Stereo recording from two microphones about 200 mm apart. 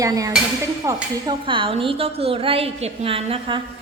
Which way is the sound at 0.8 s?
25° right (ahead or behind).